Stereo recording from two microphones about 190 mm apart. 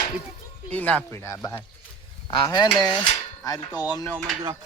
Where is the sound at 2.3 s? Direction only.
25° left (ahead or behind).